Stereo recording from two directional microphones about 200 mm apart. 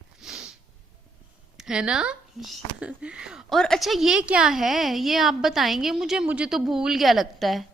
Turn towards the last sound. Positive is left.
turn(degrees=0)  # may be behind; listen again after turning